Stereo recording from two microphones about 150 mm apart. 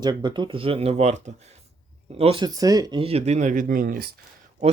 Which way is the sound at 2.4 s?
25° right (ahead or behind).